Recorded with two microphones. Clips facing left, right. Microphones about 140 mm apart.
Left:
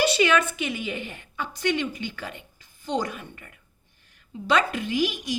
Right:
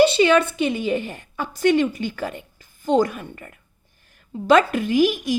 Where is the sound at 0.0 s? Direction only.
30° right (ahead or behind).